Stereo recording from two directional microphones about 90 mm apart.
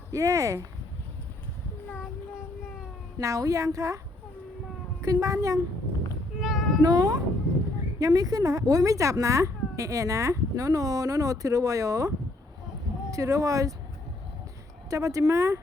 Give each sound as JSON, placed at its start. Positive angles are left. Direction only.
{"t": 0.1, "sound": "speech", "side_deg": -40}
{"t": 3.2, "sound": "speech", "side_deg": -40}
{"t": 6.4, "sound": "meow", "side_deg": 0}
{"t": 6.8, "sound": "speech", "side_deg": -45}
{"t": 14.8, "sound": "speech", "side_deg": -35}